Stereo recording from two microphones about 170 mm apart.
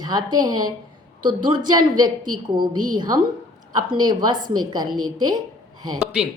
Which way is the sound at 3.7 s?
25° right (ahead or behind).